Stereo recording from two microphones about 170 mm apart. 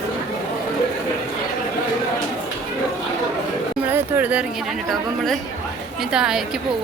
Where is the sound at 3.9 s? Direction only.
10° right (ahead or behind).